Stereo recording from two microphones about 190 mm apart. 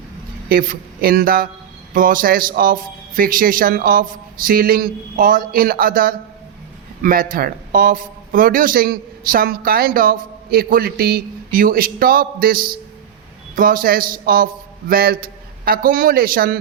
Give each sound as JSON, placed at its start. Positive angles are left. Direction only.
{"t": 0.4, "sound": "speech", "side_deg": -50}